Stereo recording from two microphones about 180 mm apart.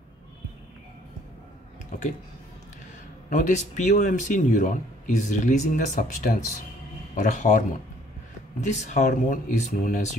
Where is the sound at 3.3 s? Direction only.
40° left (ahead or behind).